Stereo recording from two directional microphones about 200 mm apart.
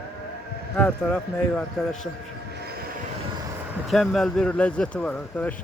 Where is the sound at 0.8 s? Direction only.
5° left (ahead or behind).